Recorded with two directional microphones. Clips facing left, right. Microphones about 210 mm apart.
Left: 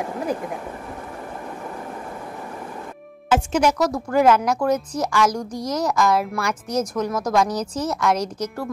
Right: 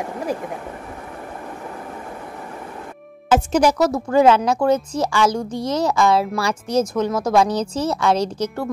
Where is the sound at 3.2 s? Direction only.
40° right (ahead or behind).